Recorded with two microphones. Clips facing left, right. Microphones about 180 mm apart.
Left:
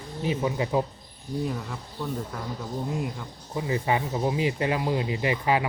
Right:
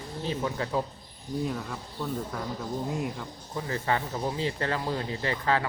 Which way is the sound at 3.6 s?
15° left (ahead or behind).